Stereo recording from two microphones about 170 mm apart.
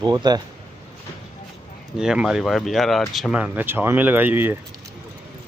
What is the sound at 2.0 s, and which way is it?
Speech, 5° right (ahead or behind).